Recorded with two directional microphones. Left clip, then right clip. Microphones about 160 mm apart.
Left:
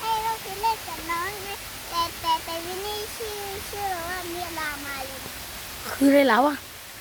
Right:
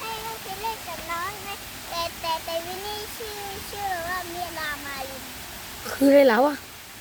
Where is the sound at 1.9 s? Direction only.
5° right (ahead or behind).